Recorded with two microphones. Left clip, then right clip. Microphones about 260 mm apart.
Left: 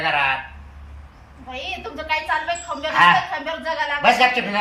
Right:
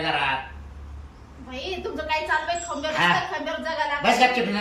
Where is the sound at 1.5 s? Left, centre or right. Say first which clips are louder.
Left 2 dB; centre.